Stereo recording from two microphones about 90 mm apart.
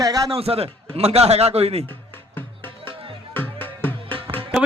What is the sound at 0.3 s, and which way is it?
Speech, 90° right.